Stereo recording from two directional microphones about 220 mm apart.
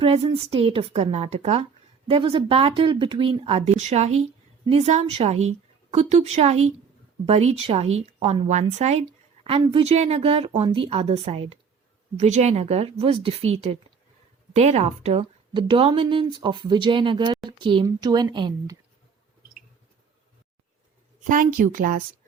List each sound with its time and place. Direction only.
0.0 s a woman's voice: 25° right (ahead or behind)
21.2 s a woman's voice: 40° right (ahead or behind)